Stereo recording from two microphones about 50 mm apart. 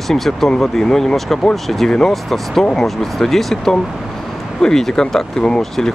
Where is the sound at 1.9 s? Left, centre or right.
Centre.